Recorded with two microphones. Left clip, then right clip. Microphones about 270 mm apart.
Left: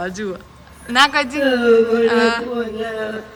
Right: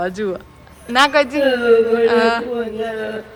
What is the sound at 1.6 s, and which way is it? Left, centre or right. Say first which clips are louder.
Speech: left 1 dB; centre.